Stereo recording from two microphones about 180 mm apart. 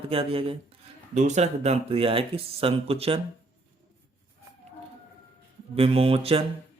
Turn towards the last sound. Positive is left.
turn(degrees=-30)  # may be behind; listen again after turning